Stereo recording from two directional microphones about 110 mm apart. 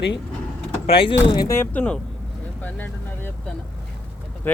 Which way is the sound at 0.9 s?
50° left (ahead or behind).